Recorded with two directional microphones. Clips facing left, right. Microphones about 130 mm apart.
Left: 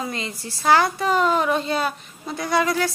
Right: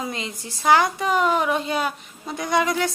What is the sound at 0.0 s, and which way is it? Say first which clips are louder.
A woman's voice: left 1 dB; 20° right (ahead or behind).